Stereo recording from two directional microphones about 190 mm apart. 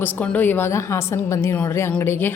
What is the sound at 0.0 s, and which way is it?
A woman's voice, 10° left (ahead or behind).